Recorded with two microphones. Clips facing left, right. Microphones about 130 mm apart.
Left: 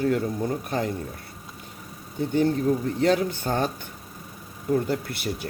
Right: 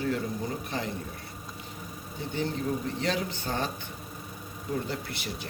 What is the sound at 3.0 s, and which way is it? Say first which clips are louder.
Speech: left 11 dB; 50° left (ahead or behind).